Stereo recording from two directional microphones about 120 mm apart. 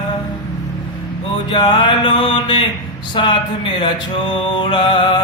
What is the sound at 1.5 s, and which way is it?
Mantra, 40° left (ahead or behind).